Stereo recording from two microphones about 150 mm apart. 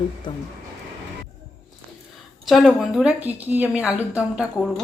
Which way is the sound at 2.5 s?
Centre (ahead or behind).